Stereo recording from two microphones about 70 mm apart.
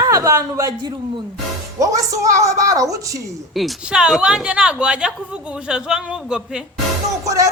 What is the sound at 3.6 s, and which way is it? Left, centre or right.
Speech, centre.